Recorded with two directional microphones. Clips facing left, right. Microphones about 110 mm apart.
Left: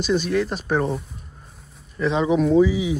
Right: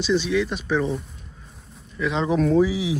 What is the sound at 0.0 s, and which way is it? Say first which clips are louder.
Speech: even; 45° left (ahead or behind).